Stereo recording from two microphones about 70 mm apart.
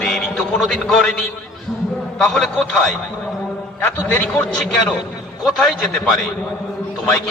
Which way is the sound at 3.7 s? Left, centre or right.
Left.